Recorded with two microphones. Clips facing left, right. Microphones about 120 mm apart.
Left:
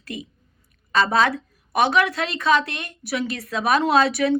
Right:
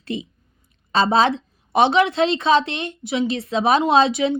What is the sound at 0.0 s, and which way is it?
A woman's voice, 25° right (ahead or behind).